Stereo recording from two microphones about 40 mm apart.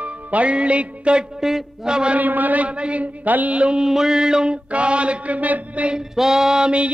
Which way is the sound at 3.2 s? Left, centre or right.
Right.